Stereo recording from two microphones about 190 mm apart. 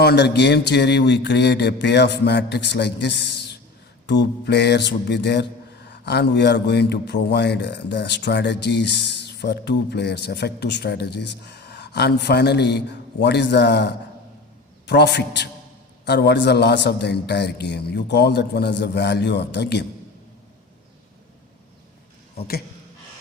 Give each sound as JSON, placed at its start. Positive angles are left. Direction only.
{"t": 0.0, "sound": "a man's voice", "side_deg": 60}